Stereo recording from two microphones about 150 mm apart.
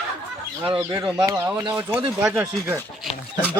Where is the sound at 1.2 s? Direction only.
20° right (ahead or behind).